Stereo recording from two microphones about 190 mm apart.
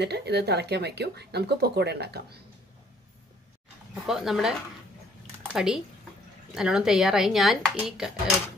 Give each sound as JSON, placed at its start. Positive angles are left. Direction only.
{"t": 0.0, "sound": "speech", "side_deg": -60}
{"t": 3.9, "sound": "speech", "side_deg": 0}
{"t": 5.2, "sound": "a sound", "side_deg": -10}
{"t": 6.5, "sound": "speech", "side_deg": -5}